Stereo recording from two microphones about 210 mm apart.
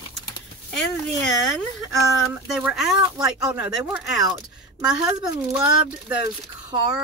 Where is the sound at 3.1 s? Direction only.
15° right (ahead or behind).